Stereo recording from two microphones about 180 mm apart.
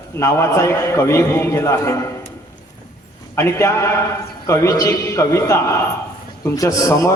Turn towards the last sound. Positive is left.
turn(degrees=20)  # may be behind; listen again after turning